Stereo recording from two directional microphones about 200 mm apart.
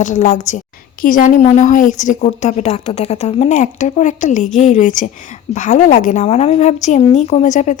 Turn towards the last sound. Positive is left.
turn(degrees=40)  # may be behind; listen again after turning